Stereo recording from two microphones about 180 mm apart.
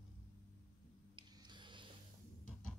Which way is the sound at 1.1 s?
25° right (ahead or behind).